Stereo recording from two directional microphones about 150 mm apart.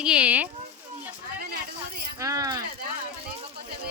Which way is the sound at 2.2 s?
20° right (ahead or behind).